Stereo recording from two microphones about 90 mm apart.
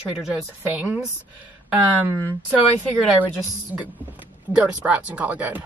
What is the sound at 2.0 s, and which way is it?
Speech, 25° right (ahead or behind).